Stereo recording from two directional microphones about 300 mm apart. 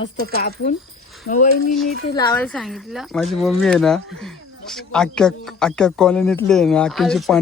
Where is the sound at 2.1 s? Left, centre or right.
Centre.